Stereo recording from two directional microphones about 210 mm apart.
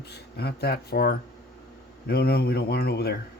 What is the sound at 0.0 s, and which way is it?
Speech, 50° left (ahead or behind).